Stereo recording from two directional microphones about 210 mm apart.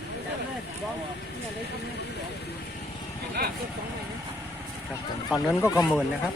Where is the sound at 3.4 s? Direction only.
50° right (ahead or behind).